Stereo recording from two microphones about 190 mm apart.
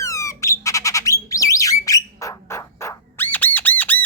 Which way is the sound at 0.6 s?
15° left (ahead or behind).